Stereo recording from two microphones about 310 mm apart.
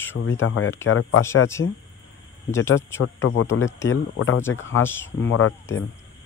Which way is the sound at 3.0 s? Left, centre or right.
Left.